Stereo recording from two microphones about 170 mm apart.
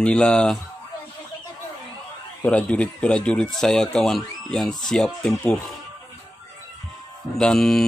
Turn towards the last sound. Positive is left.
turn(degrees=5)  # may be behind; listen again after turning